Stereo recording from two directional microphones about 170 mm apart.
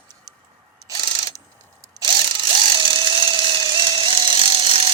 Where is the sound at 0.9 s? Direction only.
30° right (ahead or behind).